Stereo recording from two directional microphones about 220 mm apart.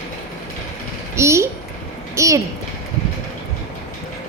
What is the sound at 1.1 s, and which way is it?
A child's voice, 10° right (ahead or behind).